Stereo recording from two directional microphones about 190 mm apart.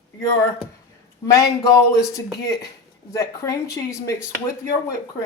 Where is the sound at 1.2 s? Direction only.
20° left (ahead or behind).